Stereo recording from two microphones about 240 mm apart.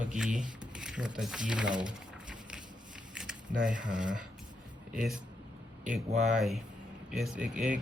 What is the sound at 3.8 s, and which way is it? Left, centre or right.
Speech, centre.